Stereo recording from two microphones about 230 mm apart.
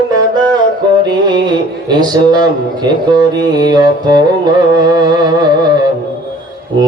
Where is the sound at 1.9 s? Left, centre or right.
Centre.